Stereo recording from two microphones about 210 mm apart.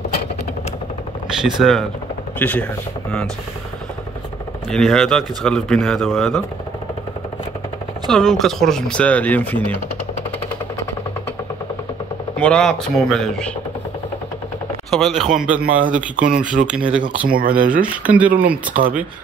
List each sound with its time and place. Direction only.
1.6 s speech: centre (ahead or behind)
4.6 s speech: 5° left (ahead or behind)
8.1 s speech: centre (ahead or behind)
12.4 s speech: 5° left (ahead or behind)
14.9 s speech: centre (ahead or behind)
15.6 s speech: 40° right (ahead or behind)
16.6 s speech: 5° right (ahead or behind)
17.3 s speech: 45° right (ahead or behind)
17.6 s speech: 5° right (ahead or behind)